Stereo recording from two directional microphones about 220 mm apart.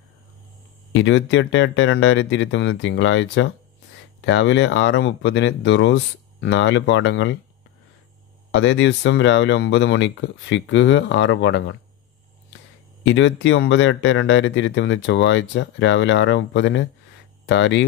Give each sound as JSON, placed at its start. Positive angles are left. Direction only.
{"t": 0.9, "sound": "speech", "side_deg": 60}
{"t": 8.5, "sound": "speech", "side_deg": 60}
{"t": 13.0, "sound": "speech", "side_deg": 55}